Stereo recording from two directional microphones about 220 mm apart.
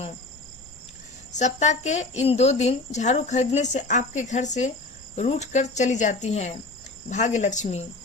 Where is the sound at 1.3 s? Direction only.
30° left (ahead or behind).